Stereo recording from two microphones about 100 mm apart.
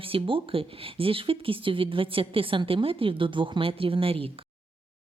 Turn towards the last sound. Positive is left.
turn(degrees=-70)  # may be behind; listen again after turning